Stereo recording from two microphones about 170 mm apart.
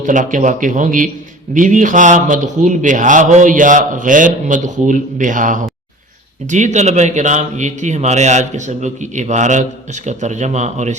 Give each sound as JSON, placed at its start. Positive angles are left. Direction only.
{"t": 0.0, "sound": "speech", "side_deg": -50}